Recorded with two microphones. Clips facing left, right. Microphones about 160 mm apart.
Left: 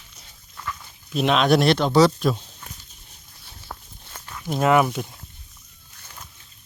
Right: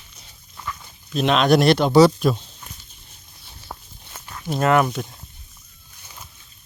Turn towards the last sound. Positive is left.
turn(degrees=5)  # may be behind; listen again after turning